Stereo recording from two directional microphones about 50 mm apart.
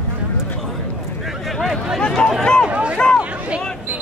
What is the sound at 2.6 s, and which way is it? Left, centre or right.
Speech, right.